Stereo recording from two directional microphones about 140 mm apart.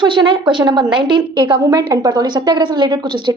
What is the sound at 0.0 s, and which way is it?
A woman's voice, 35° right (ahead or behind).